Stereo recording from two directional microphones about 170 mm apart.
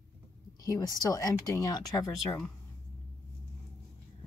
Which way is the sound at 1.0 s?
20° left (ahead or behind).